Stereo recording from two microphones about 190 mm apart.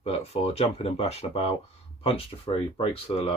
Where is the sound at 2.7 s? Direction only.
30° left (ahead or behind).